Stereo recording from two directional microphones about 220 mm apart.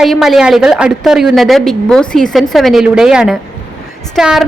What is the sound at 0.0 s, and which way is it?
A woman's voice, centre (ahead or behind).